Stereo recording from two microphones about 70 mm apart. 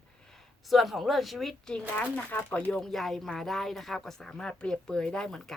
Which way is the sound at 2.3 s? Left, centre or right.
Left.